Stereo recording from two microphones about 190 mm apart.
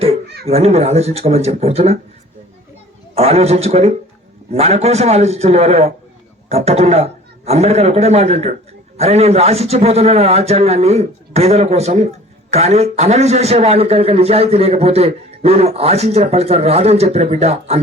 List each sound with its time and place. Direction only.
0.4 s a man's voice: 35° right (ahead or behind)
3.2 s a man's voice: 35° right (ahead or behind)